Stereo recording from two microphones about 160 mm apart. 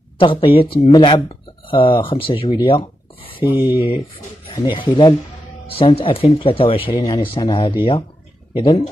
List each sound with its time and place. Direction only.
0.2 s speech: 30° left (ahead or behind)
3.5 s speech: 15° right (ahead or behind)
4.5 s speech: 30° left (ahead or behind)